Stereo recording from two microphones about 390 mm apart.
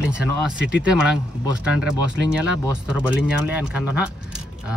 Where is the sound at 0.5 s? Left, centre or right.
Left.